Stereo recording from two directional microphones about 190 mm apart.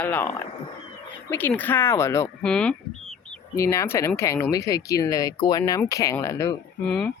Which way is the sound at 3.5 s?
15° left (ahead or behind).